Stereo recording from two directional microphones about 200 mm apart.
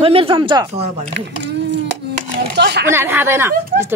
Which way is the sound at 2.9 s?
10° right (ahead or behind).